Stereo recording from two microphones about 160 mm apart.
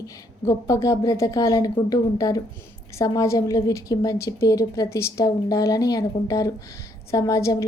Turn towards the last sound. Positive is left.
turn(degrees=20)  # may be behind; listen again after turning